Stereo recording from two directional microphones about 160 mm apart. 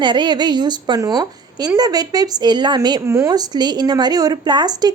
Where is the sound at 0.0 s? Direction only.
30° right (ahead or behind).